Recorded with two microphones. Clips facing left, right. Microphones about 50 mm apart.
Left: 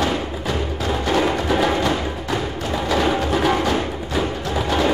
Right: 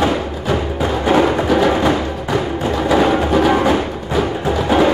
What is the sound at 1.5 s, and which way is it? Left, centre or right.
Music, centre.